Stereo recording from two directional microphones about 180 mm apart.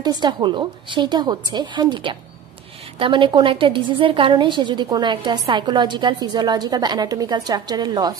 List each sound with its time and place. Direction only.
0.0 s a woman's voice: 25° right (ahead or behind)